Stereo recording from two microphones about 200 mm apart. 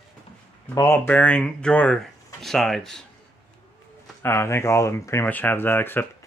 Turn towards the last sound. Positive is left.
turn(degrees=10)  # may be behind; listen again after turning